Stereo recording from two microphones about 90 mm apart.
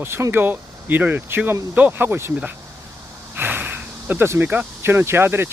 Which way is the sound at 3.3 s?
20° right (ahead or behind).